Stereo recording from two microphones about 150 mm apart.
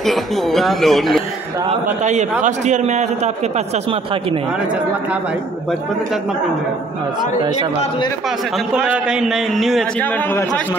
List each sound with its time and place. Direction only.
0.0 s speech: centre (ahead or behind)
1.7 s a man's voice: 50° right (ahead or behind)
8.9 s speech: 5° right (ahead or behind)